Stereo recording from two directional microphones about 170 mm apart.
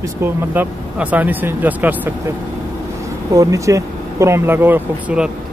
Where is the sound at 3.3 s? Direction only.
20° right (ahead or behind).